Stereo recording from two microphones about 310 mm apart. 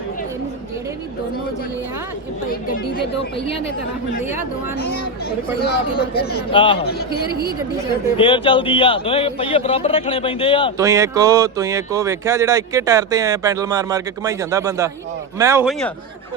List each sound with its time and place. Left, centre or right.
2.5 s speech: left
5.6 s speech: left
6.5 s a man's voice: centre
8.1 s a man's voice: centre
10.8 s speech: centre